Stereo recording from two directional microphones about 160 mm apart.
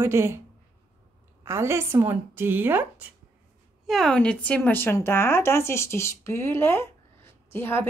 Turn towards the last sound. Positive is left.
turn(degrees=15)  # may be behind; listen again after turning